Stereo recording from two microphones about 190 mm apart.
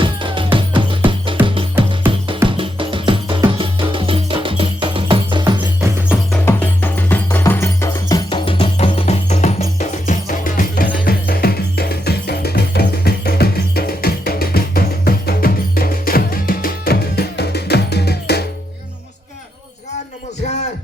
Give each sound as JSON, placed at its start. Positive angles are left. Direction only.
{"t": 0.0, "sound": "music", "side_deg": -25}
{"t": 2.5, "sound": "music", "side_deg": -25}
{"t": 6.4, "sound": "music", "side_deg": 10}